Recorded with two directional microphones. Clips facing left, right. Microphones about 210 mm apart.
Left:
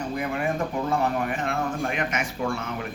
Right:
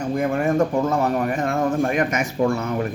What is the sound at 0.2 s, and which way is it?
Speech, 45° right (ahead or behind).